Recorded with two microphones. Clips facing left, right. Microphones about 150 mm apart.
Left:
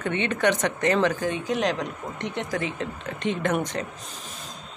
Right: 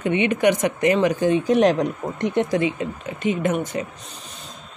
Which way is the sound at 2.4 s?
20° right (ahead or behind).